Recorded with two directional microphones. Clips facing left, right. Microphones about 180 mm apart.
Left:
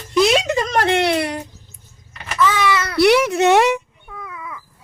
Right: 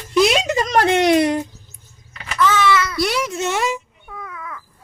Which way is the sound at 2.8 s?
65° left (ahead or behind).